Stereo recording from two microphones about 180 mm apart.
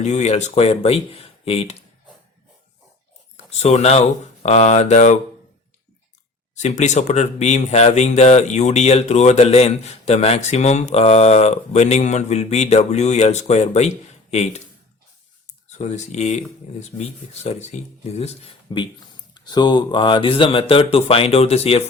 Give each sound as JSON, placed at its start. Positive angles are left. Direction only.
{"t": 0.0, "sound": "speech", "side_deg": 40}
{"t": 3.3, "sound": "speech", "side_deg": 35}
{"t": 6.6, "sound": "speech", "side_deg": 40}
{"t": 15.8, "sound": "speech", "side_deg": 40}